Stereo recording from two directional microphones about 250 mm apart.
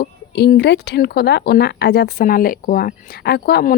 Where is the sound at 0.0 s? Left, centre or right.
Left.